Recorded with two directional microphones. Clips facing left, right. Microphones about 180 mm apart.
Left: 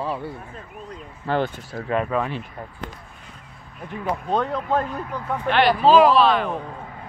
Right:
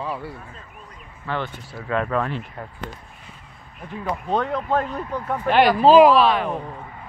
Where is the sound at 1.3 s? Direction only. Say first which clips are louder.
Left 5 dB; 40° left (ahead or behind).